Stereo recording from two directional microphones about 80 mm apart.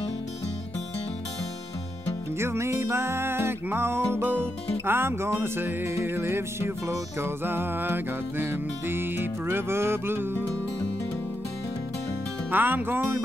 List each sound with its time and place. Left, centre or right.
2.3 s music: right
12.4 s music: right